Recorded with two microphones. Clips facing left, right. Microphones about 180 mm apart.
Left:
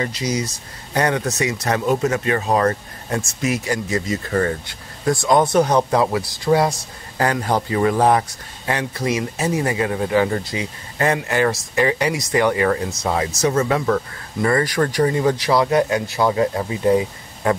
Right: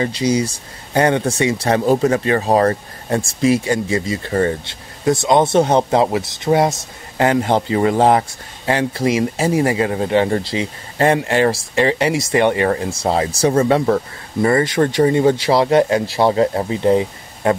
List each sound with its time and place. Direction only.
0.0 s speech: 30° right (ahead or behind)